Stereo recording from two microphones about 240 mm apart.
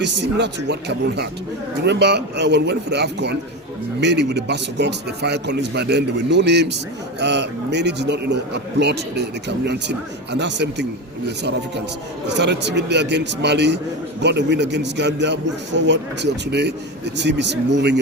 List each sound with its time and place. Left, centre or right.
0.0 s a man's voice: right
12.3 s a man's voice: right